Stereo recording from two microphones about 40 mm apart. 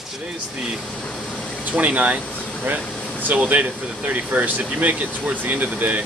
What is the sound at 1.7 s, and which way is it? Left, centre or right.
Speech, right.